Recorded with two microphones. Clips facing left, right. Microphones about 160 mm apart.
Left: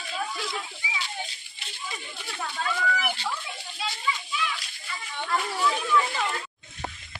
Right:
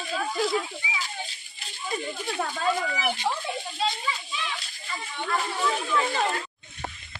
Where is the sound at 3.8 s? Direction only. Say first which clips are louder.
Even; 30° right (ahead or behind).